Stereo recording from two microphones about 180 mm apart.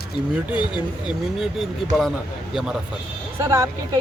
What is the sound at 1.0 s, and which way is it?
Speech, centre (ahead or behind).